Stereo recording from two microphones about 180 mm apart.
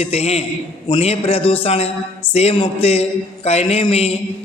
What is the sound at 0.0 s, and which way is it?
A man's voice, 35° left (ahead or behind).